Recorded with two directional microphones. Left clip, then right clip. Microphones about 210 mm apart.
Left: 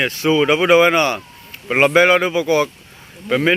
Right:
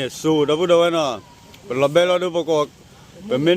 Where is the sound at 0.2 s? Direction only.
5° right (ahead or behind).